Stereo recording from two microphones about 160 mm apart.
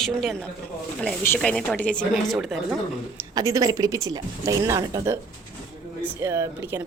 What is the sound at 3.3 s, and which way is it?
Speech, 20° right (ahead or behind).